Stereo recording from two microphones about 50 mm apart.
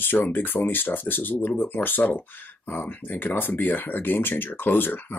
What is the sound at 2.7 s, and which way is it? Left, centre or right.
Speech, left.